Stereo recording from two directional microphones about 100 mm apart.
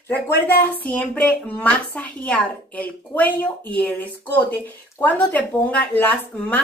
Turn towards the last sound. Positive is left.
turn(degrees=15)  # may be behind; listen again after turning